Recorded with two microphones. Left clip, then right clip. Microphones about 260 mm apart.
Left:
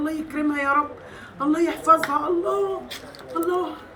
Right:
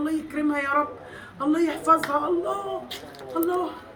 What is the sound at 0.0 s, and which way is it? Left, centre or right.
Speech, centre.